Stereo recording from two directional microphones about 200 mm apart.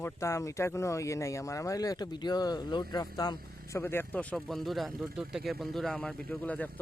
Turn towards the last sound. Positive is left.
turn(degrees=5)  # may be behind; listen again after turning